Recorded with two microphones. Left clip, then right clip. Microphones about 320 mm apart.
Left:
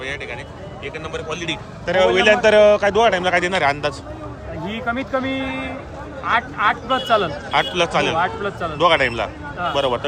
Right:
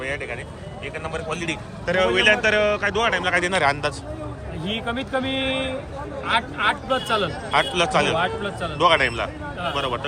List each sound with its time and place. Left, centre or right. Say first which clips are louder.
0.0 s a man's voice: even; centre
5.3 s speech: right 1 dB; left
6.2 s a man's voice: left 3 dB; centre